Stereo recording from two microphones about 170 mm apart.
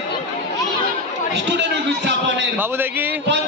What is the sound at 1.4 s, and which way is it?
A man's voice, 90° right.